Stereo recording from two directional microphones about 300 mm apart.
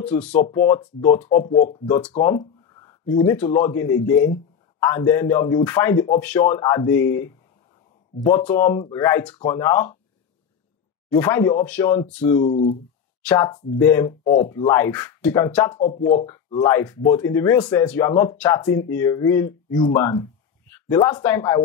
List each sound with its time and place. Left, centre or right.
0.0 s speech: centre
4.8 s speech: centre
11.1 s speech: centre
12.4 s speech: left
13.2 s speech: centre
15.8 s speech: left
16.3 s speech: centre